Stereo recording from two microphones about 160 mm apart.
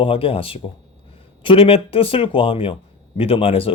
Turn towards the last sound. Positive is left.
turn(degrees=35)  # may be behind; listen again after turning